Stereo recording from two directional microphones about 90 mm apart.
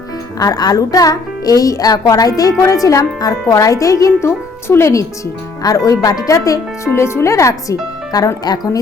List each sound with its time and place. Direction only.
0.3 s speech: 45° left (ahead or behind)